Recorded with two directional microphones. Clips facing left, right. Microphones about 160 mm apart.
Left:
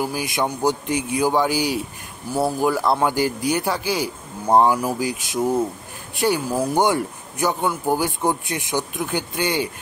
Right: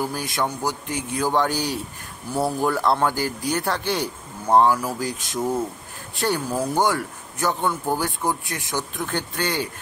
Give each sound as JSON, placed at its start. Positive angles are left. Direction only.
{"t": 0.0, "sound": "speech", "side_deg": 10}
{"t": 0.3, "sound": "speech", "side_deg": 20}
{"t": 3.6, "sound": "a man's voice", "side_deg": 5}
{"t": 4.6, "sound": "speech", "side_deg": 15}